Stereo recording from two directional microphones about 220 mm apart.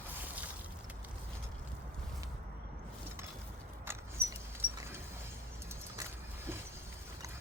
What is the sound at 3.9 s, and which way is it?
Vehicle, 10° right (ahead or behind).